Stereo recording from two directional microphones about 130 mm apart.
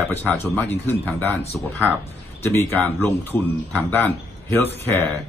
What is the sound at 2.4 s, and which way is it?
A man's voice, 15° left (ahead or behind).